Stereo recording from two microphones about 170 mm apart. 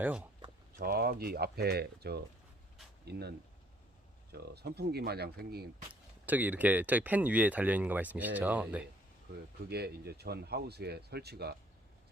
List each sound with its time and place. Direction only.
0.0 s speech: 10° right (ahead or behind)
0.8 s speech: 65° right (ahead or behind)
5.9 s speech: 10° right (ahead or behind)
9.6 s speech: 70° right (ahead or behind)